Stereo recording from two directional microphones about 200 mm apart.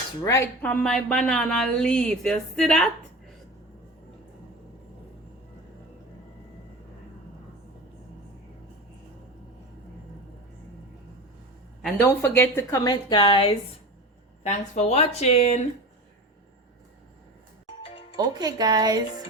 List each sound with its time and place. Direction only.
0.3 s speech: 10° left (ahead or behind)
12.0 s a woman's voice: 10° left (ahead or behind); by 15.6 s 30° left (ahead or behind)
17.8 s music: 25° left (ahead or behind)
18.2 s speech: 20° right (ahead or behind)